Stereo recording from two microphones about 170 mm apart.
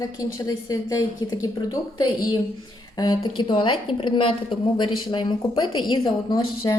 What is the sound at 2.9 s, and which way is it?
A woman's voice, 25° left (ahead or behind).